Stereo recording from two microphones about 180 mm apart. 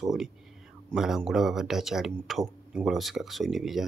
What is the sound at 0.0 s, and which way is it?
Speech, centre (ahead or behind).